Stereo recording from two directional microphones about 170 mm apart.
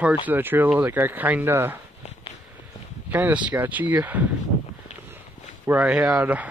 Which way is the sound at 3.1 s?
10° right (ahead or behind).